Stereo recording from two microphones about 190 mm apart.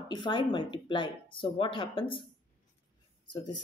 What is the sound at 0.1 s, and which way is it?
Speech, 25° left (ahead or behind).